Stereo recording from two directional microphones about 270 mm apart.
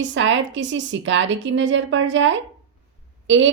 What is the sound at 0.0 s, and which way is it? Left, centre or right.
A woman's voice, right.